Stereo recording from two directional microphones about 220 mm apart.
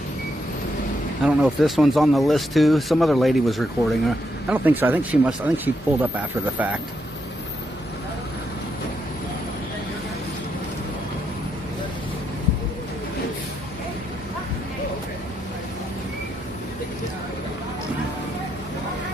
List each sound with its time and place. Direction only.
1.2 s speech: centre (ahead or behind)